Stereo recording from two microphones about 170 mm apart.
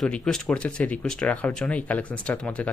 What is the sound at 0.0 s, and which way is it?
A man's voice, 5° left (ahead or behind).